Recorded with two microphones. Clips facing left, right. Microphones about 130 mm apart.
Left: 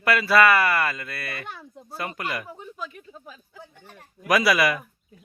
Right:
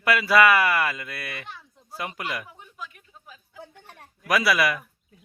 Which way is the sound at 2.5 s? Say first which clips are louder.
Left 6 dB; 35° left (ahead or behind).